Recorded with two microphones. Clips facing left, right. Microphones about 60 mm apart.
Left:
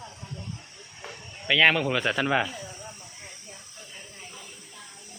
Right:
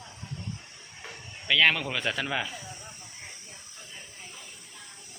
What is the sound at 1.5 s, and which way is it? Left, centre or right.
Speech, centre.